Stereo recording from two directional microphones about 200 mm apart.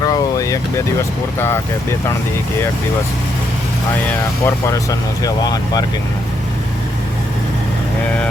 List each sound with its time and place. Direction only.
0.0 s vehicle: 15° left (ahead or behind)
4.4 s speech: 15° left (ahead or behind)